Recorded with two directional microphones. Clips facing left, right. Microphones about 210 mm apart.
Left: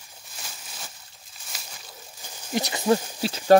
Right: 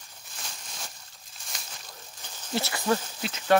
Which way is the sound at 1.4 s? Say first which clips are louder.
Left 1 dB; 5° left (ahead or behind).